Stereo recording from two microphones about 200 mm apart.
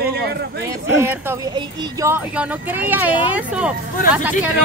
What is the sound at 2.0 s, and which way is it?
A man's voice, 10° right (ahead or behind).